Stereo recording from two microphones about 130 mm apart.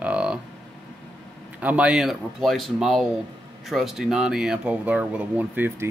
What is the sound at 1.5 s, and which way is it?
Speech, 10° right (ahead or behind).